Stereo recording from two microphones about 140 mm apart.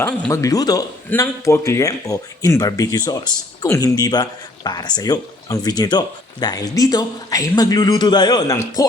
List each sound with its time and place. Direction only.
0.3 s speech: 25° left (ahead or behind)